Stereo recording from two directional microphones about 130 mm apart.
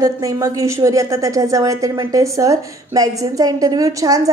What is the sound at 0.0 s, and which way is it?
A woman's voice, 25° right (ahead or behind).